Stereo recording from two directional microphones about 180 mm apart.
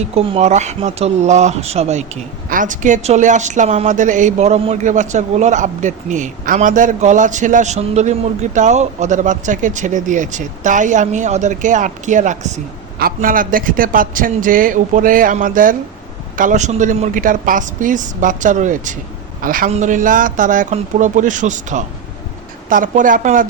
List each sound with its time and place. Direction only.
0.0 s speech: 35° right (ahead or behind)